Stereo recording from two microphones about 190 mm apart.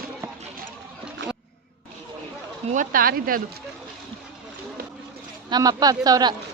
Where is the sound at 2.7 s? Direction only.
45° right (ahead or behind).